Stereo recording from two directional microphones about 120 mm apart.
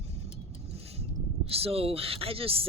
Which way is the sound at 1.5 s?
55° right (ahead or behind).